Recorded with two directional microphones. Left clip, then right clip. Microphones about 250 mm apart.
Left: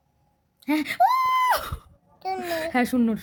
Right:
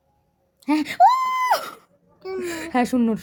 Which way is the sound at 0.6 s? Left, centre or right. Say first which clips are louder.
Right 4 dB; centre.